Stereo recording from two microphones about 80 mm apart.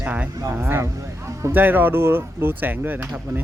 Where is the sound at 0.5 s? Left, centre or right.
Right.